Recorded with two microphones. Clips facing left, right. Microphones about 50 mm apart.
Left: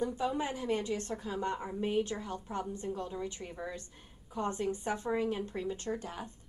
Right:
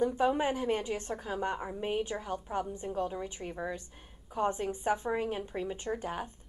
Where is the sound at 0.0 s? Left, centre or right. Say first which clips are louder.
Right 5 dB; right.